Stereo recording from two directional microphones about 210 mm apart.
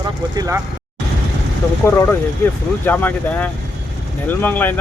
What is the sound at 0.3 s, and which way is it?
Speech, 15° right (ahead or behind).